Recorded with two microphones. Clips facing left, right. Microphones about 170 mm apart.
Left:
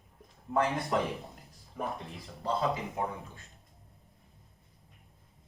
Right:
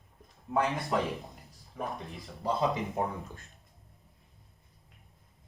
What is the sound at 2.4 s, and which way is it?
Speech, 20° right (ahead or behind).